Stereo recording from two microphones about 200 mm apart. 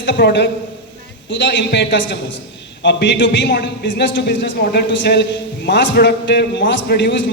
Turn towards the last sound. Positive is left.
turn(degrees=60)  # may be behind; listen again after turning